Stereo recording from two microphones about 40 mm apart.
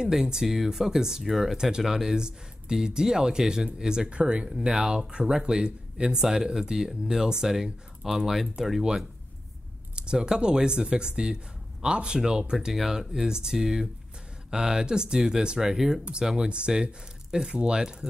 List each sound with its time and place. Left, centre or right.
0.0 s speech: centre
4.5 s speech: centre
9.9 s speech: right
12.5 s speech: centre
16.0 s speech: right